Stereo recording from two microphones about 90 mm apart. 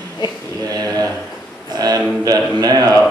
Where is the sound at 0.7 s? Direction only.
45° right (ahead or behind).